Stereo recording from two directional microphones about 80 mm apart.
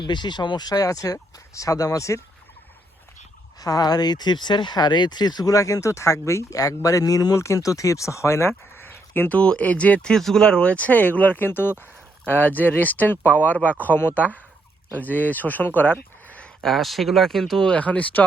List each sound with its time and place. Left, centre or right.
0.0 s speech: left
3.6 s speech: left
7.3 s speech: left
9.4 s speech: centre
16.6 s speech: centre
17.7 s speech: centre